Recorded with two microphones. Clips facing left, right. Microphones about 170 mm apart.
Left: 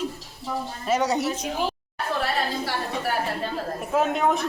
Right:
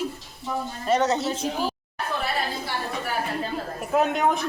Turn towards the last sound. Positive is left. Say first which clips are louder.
# even
turn(degrees=0)  # may be behind; listen again after turning